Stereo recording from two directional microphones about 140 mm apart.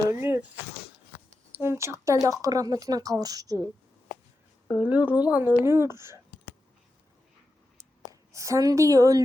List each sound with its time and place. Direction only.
0.1 s speech: 15° right (ahead or behind)
1.5 s speech: 20° right (ahead or behind)
4.7 s a woman's voice: 10° right (ahead or behind)
8.3 s speech: 20° right (ahead or behind)